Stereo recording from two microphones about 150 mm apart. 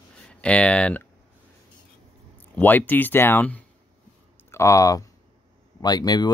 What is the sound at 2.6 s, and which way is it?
Speech, 10° left (ahead or behind).